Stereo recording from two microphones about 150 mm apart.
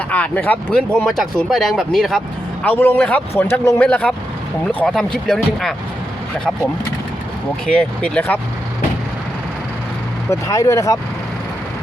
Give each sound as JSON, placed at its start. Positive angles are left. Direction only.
{"t": 0.1, "sound": "speech", "side_deg": 10}
{"t": 2.6, "sound": "speech", "side_deg": 10}
{"t": 7.7, "sound": "speech", "side_deg": 5}
{"t": 10.2, "sound": "speech", "side_deg": 20}